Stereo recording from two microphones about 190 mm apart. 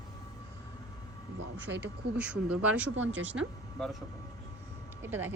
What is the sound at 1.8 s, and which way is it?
Speech, 5° right (ahead or behind).